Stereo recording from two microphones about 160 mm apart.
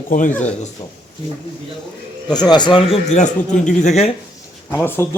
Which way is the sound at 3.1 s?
45° left (ahead or behind).